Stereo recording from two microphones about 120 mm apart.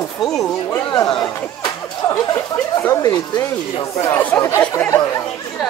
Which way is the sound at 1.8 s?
25° left (ahead or behind).